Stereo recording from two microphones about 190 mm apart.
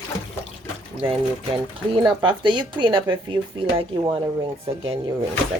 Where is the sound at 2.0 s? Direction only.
25° right (ahead or behind).